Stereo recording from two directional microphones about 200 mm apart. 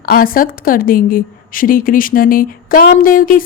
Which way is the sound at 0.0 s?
45° left (ahead or behind).